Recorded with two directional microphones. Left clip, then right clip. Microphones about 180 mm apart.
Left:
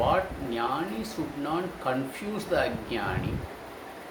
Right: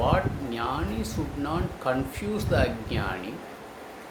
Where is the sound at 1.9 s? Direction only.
15° right (ahead or behind).